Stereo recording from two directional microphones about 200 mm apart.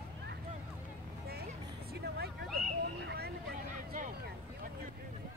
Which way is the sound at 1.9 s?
50° right (ahead or behind).